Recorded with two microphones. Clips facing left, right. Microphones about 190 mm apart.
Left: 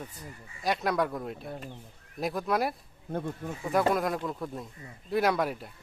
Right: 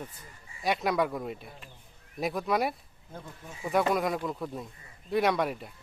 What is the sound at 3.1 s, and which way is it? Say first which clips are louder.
Speech: left 11 dB; 60° left (ahead or behind).